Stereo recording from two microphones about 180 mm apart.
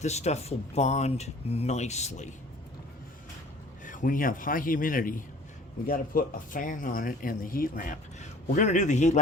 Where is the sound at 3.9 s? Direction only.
50° left (ahead or behind).